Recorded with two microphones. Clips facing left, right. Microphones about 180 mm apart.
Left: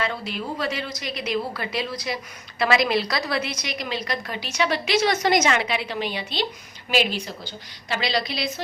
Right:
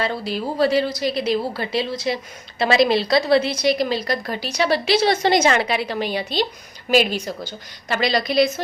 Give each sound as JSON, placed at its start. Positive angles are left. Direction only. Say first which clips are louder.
{"t": 0.0, "sound": "a woman's voice", "louder": "right 4 dB", "side_deg": -35}